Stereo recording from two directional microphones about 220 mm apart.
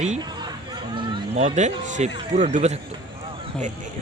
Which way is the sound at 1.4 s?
30° right (ahead or behind).